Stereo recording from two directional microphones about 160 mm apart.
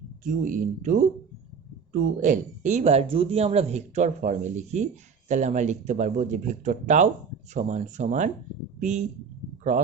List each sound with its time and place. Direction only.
0.3 s speech: 55° right (ahead or behind)